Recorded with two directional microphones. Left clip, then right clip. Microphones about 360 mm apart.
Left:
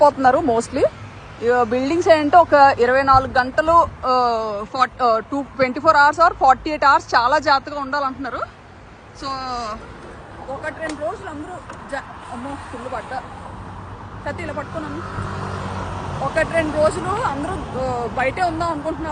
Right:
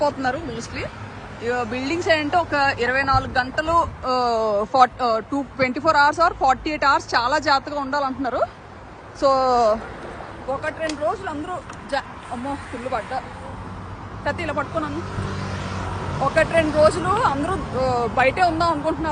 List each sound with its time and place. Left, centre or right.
0.0 s speech: centre
10.6 s speech: centre
12.9 s speech: centre
14.3 s speech: centre
16.2 s speech: centre